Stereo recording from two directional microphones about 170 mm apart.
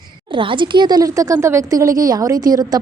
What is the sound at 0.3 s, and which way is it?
Speech, 30° right (ahead or behind).